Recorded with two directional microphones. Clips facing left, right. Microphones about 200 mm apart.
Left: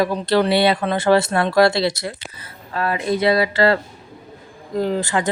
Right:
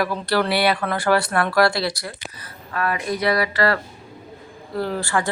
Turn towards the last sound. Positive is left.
turn(degrees=20)  # may be behind; listen again after turning